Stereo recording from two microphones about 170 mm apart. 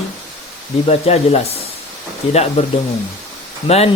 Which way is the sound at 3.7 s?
35° left (ahead or behind).